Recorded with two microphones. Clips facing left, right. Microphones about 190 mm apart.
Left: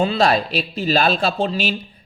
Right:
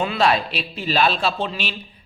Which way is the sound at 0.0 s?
35° left (ahead or behind).